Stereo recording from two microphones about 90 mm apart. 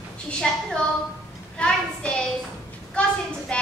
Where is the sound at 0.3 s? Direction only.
5° left (ahead or behind).